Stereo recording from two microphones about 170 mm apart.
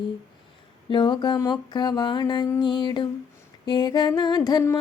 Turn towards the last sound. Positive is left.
turn(degrees=20)  # may be behind; listen again after turning